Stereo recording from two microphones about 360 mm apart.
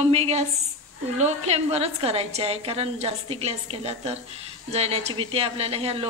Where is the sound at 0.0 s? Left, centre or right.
Centre.